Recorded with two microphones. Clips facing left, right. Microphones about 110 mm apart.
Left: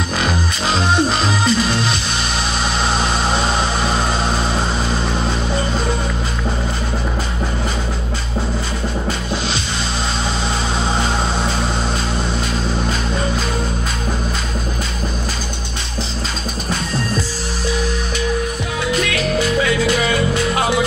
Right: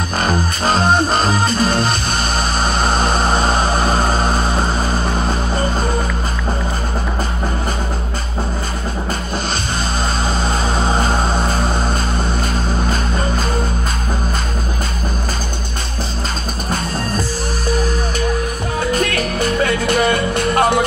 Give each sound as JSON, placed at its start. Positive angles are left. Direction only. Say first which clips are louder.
{"t": 0.2, "sound": "music", "louder": "right 5 dB", "side_deg": -45}
{"t": 10.9, "sound": "a sound", "louder": "right 2 dB", "side_deg": -45}
{"t": 18.9, "sound": "music", "louder": "even", "side_deg": -45}